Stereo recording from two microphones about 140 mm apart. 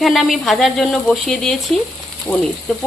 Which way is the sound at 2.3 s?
10° left (ahead or behind).